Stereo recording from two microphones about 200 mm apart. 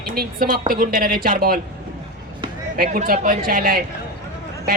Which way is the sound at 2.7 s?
45° right (ahead or behind).